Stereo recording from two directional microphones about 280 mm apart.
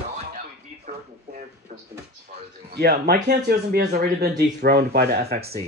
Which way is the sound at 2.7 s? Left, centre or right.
Right.